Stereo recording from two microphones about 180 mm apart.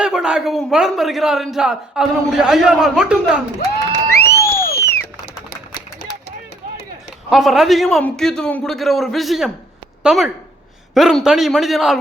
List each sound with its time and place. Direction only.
0.0 s a man's voice: 5° right (ahead or behind)
4.1 s crowd: 15° left (ahead or behind)
7.3 s a man's voice: centre (ahead or behind)